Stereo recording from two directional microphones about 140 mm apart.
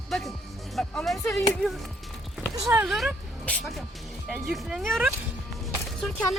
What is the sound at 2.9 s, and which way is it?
Speech, centre (ahead or behind).